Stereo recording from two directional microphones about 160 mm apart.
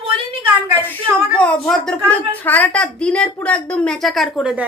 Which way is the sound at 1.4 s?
5° left (ahead or behind).